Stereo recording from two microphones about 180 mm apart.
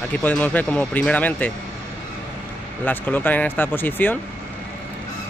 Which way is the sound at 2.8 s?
10° left (ahead or behind).